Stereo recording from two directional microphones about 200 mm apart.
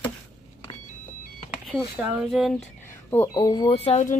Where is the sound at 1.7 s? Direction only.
5° right (ahead or behind).